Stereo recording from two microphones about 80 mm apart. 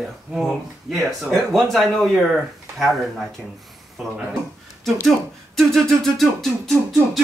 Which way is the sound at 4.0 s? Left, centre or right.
Centre.